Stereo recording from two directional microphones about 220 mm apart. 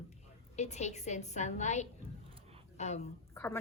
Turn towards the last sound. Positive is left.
turn(degrees=10)  # may be behind; listen again after turning